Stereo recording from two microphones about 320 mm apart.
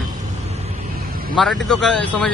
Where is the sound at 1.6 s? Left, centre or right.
Centre.